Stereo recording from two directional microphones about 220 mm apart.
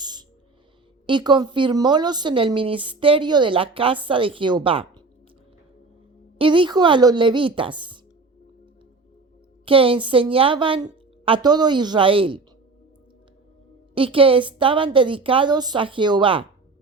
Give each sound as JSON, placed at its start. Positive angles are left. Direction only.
{"t": 0.0, "sound": "music", "side_deg": -20}
{"t": 1.0, "sound": "a woman's voice", "side_deg": -20}
{"t": 6.4, "sound": "a woman's voice", "side_deg": -20}
{"t": 9.6, "sound": "a woman's voice", "side_deg": -25}
{"t": 13.9, "sound": "a woman's voice", "side_deg": -25}